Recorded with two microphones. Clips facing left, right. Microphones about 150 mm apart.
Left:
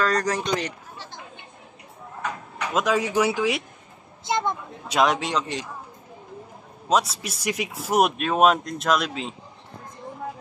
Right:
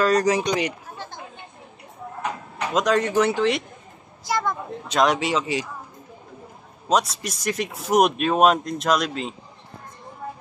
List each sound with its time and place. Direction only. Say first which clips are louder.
0.0 s speech: right 4 dB; 10° right (ahead or behind)
2.7 s speech: right 2 dB; 5° left (ahead or behind)
4.2 s a woman's voice: even; 20° left (ahead or behind)
4.8 s speech: right 1 dB; 5° left (ahead or behind)
6.9 s speech: right 1 dB; 5° left (ahead or behind)